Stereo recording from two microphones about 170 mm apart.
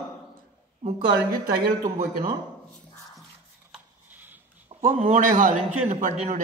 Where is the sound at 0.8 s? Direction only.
55° right (ahead or behind).